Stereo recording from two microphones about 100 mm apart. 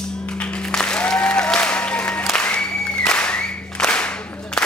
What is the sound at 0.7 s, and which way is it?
Applause, 10° left (ahead or behind).